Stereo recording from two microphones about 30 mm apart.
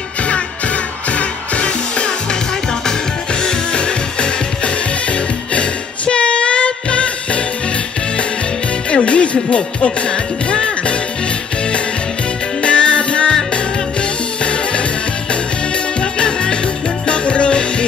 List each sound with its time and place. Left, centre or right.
1.1 s music: left
3.4 s music: left
8.9 s music: left
12.6 s music: left
14.4 s music: left
16.0 s music: left